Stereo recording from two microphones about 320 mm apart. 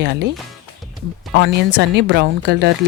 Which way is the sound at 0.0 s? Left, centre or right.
Right.